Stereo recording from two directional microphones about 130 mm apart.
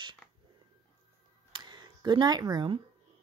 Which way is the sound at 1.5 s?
35° right (ahead or behind).